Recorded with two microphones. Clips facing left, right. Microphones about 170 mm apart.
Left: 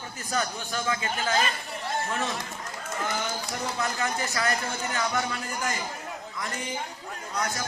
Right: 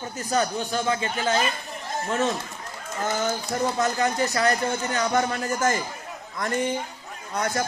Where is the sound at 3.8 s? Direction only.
40° right (ahead or behind).